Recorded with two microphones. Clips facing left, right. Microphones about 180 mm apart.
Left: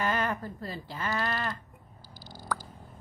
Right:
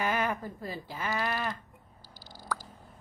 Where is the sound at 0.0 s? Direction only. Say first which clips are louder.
Even; 10° right (ahead or behind).